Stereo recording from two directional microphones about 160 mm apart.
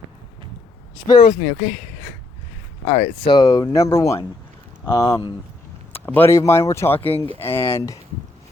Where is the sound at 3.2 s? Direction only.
25° left (ahead or behind).